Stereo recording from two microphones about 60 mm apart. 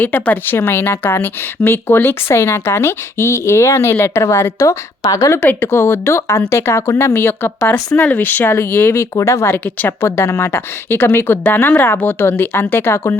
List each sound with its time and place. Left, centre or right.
0.0 s speech: left
0.5 s speech: left
5.0 s speech: left
5.5 s speech: left
9.1 s speech: left
11.4 s speech: left